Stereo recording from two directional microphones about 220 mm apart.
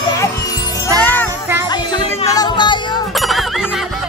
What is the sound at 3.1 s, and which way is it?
Music, centre (ahead or behind).